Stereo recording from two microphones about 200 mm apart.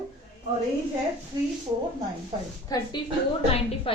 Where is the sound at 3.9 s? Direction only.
30° left (ahead or behind).